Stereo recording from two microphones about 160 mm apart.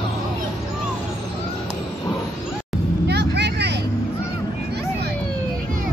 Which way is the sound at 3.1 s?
90° right.